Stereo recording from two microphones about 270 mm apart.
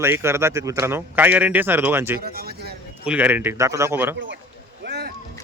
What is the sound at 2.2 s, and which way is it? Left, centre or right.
Speech, right.